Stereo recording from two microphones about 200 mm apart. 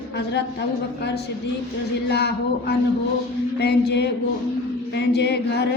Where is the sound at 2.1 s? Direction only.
55° left (ahead or behind).